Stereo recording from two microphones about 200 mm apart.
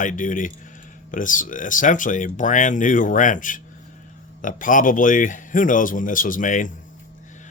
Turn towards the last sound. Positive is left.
turn(degrees=40)  # may be behind; listen again after turning